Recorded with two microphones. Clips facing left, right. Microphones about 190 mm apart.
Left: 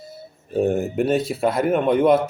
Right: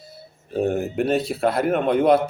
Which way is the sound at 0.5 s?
Centre (ahead or behind).